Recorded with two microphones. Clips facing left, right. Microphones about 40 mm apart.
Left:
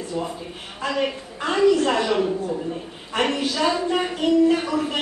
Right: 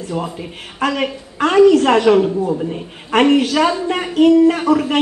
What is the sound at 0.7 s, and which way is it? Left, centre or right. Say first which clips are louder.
Speech: right 5 dB; right.